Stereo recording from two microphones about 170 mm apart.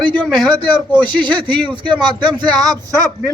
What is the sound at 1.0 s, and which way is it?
Speech, 25° right (ahead or behind).